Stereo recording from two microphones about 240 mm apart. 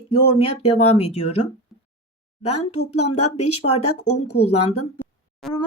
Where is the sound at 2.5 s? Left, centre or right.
Left.